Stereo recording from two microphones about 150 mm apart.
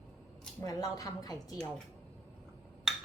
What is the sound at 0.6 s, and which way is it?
Speech, 25° left (ahead or behind).